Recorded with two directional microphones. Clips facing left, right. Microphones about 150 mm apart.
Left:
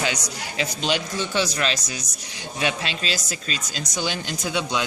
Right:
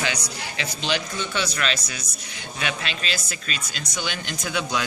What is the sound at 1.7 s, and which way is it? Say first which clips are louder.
Speech: left 1 dB; 40° left (ahead or behind).